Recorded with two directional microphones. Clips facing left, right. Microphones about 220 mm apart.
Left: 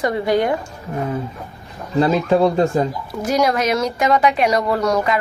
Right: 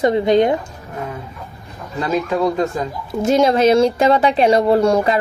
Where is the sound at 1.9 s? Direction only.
30° left (ahead or behind).